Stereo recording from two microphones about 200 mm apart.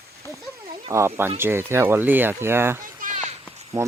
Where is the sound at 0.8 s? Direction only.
15° right (ahead or behind).